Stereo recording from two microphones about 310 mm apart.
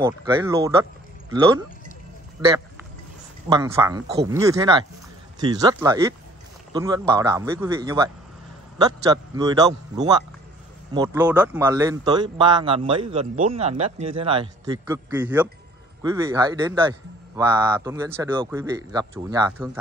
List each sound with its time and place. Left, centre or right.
0.0 s speech: centre